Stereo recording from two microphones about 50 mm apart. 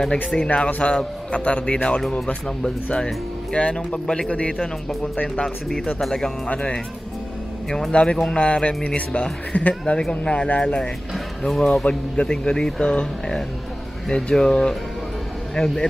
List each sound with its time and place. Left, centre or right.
0.4 s speech: left
2.0 s speech: centre
3.5 s speech: left
4.3 s speech: left
5.9 s speech: centre
7.9 s speech: left
11.1 s music: centre
11.8 s speech: centre